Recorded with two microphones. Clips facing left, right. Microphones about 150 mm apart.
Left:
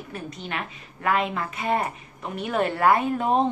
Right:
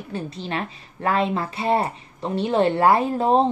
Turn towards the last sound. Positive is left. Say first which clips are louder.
# right 3 dB
turn(degrees=-30)  # may be behind; listen again after turning